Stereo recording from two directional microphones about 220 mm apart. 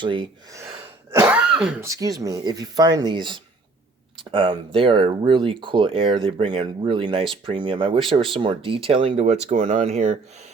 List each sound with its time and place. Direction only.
0.0 s speech: 20° right (ahead or behind); by 1.9 s 5° right (ahead or behind)
1.9 s speech: 15° right (ahead or behind); by 10.2 s 30° right (ahead or behind)